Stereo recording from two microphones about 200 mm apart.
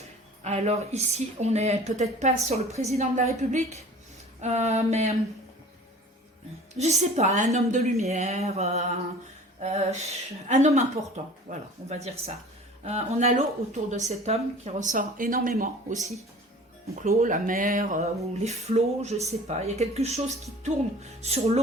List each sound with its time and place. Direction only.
0.4 s speech: 35° right (ahead or behind)
6.7 s speech: 35° right (ahead or behind)